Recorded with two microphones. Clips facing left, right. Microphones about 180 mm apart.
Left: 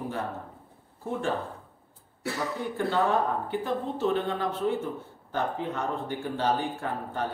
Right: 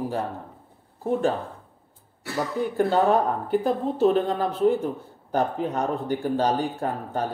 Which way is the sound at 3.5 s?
35° right (ahead or behind).